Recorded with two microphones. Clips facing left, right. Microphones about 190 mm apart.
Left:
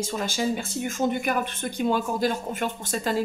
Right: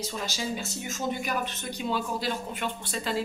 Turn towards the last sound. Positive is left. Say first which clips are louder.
# left 4 dB
turn(degrees=45)  # may be behind; listen again after turning